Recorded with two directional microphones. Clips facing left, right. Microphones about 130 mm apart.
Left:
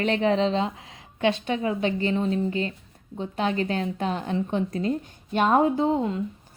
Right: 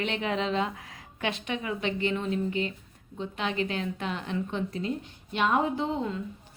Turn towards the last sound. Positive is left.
turn(degrees=35)  # may be behind; listen again after turning